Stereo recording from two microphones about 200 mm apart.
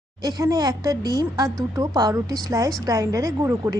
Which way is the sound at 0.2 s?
20° right (ahead or behind).